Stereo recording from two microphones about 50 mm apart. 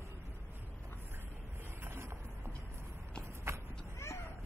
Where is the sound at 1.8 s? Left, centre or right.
Right.